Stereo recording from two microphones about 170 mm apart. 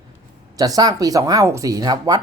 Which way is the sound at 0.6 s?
20° right (ahead or behind).